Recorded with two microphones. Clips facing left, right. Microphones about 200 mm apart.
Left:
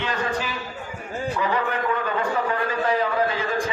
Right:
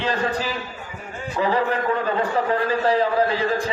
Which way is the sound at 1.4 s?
35° right (ahead or behind).